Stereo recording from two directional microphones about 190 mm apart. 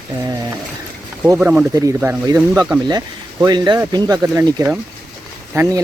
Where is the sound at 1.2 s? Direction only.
10° right (ahead or behind).